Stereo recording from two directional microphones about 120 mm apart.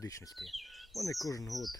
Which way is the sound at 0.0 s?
25° left (ahead or behind).